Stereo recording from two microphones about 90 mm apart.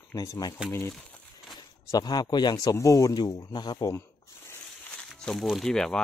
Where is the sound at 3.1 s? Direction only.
50° left (ahead or behind).